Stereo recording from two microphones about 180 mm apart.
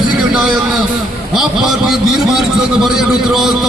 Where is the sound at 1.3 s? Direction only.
Centre (ahead or behind).